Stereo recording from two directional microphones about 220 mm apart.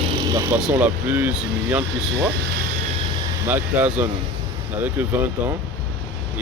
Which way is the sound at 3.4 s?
10° right (ahead or behind).